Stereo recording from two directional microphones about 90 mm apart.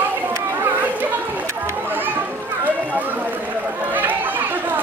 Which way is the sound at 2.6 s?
20° right (ahead or behind).